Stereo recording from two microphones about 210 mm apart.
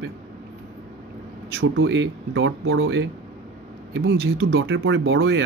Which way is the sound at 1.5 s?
70° right (ahead or behind).